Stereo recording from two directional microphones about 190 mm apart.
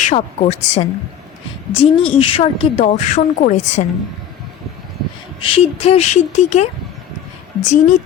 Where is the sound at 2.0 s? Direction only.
30° left (ahead or behind).